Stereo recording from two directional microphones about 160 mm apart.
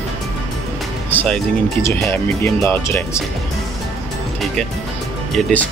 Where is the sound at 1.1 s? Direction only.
5° left (ahead or behind).